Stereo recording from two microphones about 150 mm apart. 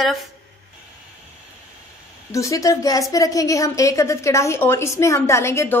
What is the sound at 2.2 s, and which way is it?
A woman's voice, 20° left (ahead or behind).